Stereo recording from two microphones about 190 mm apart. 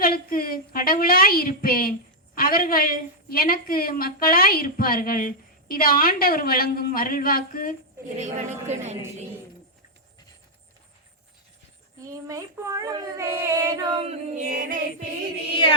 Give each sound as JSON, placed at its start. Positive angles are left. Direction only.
{"t": 0.0, "sound": "a woman's voice", "side_deg": 50}
{"t": 8.1, "sound": "a woman's voice", "side_deg": -35}
{"t": 12.0, "sound": "speech", "side_deg": -15}
{"t": 13.8, "sound": "a woman's voice", "side_deg": -30}
{"t": 14.5, "sound": "music", "side_deg": -45}